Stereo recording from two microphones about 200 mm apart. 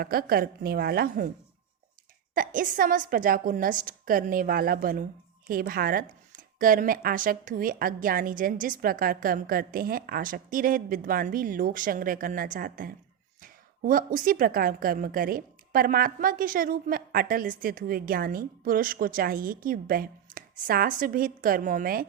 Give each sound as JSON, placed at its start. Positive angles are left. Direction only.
{"t": 0.0, "sound": "speech", "side_deg": -50}
{"t": 2.3, "sound": "speech", "side_deg": -45}